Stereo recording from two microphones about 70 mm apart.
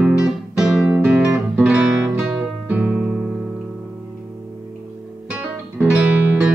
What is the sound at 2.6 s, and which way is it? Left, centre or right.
Music, right.